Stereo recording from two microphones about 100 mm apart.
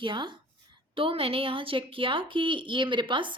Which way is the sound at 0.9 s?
65° right (ahead or behind).